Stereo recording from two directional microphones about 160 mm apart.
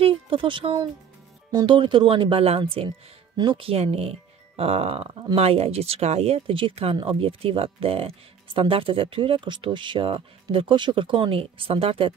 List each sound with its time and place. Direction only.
0.0 s speech: 30° right (ahead or behind)